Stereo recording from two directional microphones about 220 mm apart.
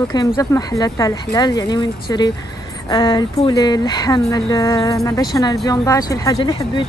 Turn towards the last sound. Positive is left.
turn(degrees=20)  # may be behind; listen again after turning